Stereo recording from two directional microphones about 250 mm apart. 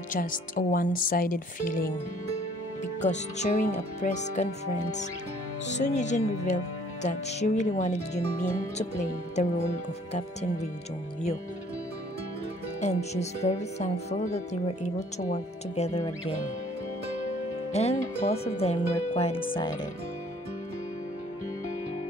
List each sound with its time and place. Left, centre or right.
0.1 s speech: left
3.0 s speech: left
5.7 s speech: left
12.8 s speech: left
17.7 s speech: left